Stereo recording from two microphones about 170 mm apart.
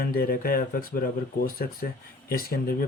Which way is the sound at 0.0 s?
60° left (ahead or behind).